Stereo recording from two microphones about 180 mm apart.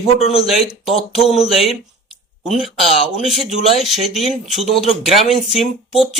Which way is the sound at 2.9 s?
35° left (ahead or behind).